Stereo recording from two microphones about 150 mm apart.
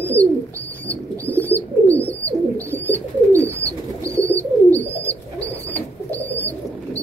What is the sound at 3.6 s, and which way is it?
Bird, 40° left (ahead or behind).